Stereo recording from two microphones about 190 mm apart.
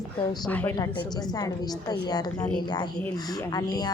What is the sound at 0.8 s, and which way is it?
A woman's voice, 20° left (ahead or behind).